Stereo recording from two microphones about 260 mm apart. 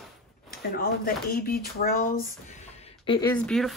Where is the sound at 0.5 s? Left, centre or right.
Left.